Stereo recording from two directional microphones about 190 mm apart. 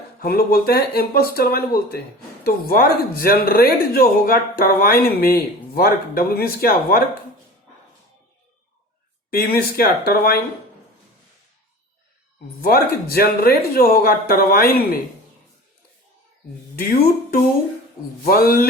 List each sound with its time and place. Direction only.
0.2 s speech: 55° left (ahead or behind)
9.3 s speech: 55° left (ahead or behind)
12.6 s speech: 55° left (ahead or behind)
18.3 s speech: 50° left (ahead or behind)